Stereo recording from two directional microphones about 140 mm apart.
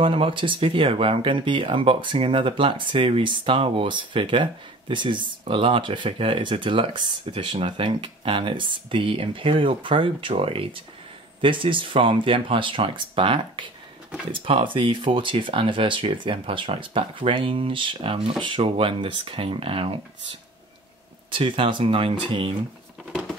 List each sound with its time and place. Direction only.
0.0 s speech: 40° right (ahead or behind)
21.3 s speech: 40° right (ahead or behind)